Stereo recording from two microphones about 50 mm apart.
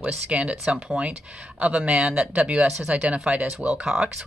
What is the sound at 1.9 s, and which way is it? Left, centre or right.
A woman's voice, right.